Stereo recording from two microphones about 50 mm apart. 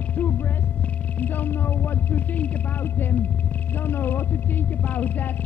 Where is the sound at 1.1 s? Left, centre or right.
Left.